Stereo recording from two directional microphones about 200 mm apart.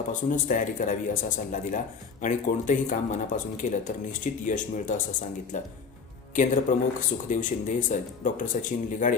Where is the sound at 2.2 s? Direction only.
40° left (ahead or behind).